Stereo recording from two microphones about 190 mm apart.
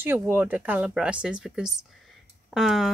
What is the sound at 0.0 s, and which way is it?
Speech, 10° right (ahead or behind).